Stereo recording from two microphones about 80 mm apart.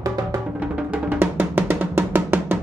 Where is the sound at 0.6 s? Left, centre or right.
Centre.